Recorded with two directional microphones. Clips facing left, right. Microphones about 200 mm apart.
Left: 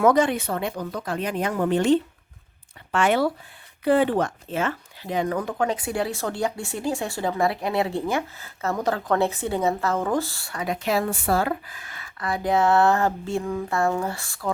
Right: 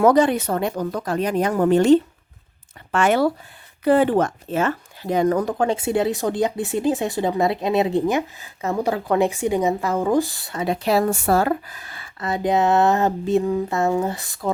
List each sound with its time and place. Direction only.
0.0 s speech: 35° right (ahead or behind); by 14.5 s 20° right (ahead or behind)